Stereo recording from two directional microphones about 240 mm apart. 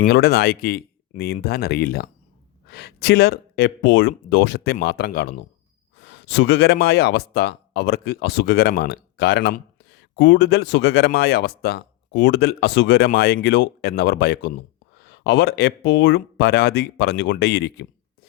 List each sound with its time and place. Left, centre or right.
0.0 s speech: left